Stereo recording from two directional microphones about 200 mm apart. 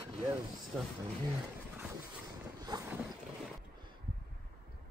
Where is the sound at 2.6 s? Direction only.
20° right (ahead or behind).